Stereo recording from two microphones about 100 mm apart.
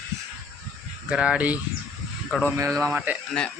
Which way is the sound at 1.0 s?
10° right (ahead or behind).